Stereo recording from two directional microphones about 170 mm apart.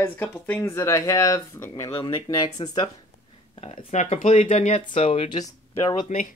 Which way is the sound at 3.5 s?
35° left (ahead or behind).